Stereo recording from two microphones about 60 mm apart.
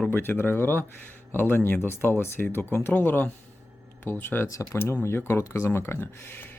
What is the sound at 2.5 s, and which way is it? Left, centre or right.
Speech, left.